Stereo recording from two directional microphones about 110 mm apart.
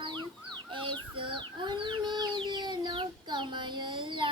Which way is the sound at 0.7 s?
50° right (ahead or behind).